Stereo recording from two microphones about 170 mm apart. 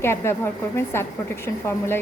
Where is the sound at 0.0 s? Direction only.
15° left (ahead or behind).